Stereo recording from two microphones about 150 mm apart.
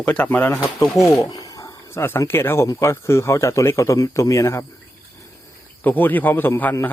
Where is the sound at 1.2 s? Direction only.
25° left (ahead or behind).